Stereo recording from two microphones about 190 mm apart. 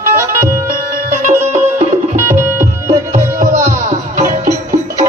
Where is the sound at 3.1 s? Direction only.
40° right (ahead or behind).